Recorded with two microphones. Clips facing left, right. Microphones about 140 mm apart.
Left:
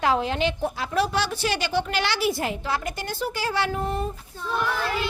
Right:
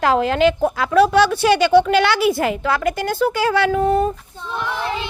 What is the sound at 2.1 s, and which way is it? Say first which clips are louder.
A woman's voice: right 7 dB; 85° right.